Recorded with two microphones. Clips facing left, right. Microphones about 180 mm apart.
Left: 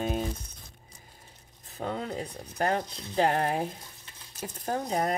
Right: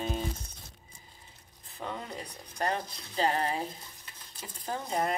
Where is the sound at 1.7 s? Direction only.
45° left (ahead or behind).